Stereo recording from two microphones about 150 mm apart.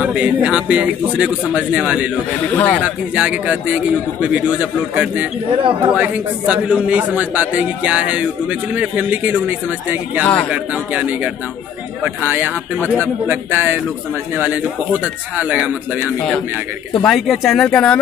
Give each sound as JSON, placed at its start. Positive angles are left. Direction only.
{"t": 0.0, "sound": "a man's voice", "side_deg": -10}
{"t": 2.5, "sound": "speech", "side_deg": 10}
{"t": 2.8, "sound": "a man's voice", "side_deg": -5}
{"t": 5.6, "sound": "speech", "side_deg": -40}
{"t": 5.9, "sound": "a man's voice", "side_deg": -10}
{"t": 10.2, "sound": "speech", "side_deg": 10}
{"t": 10.5, "sound": "a man's voice", "side_deg": -10}